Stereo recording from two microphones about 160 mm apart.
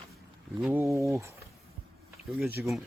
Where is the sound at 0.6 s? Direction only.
5° right (ahead or behind).